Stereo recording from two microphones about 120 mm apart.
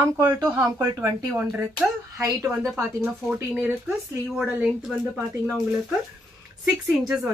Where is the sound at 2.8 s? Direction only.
20° right (ahead or behind).